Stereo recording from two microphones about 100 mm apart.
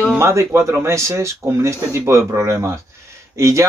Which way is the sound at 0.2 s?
30° right (ahead or behind).